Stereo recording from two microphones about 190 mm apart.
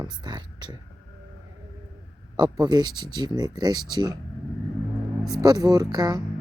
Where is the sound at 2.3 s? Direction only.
20° right (ahead or behind).